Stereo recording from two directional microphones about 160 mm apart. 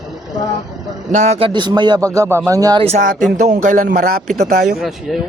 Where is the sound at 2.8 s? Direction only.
50° right (ahead or behind).